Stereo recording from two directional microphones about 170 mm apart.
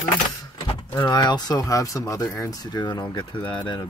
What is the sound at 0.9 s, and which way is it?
Speech, 20° left (ahead or behind).